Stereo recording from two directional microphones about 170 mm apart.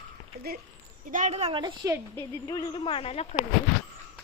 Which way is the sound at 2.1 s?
25° left (ahead or behind).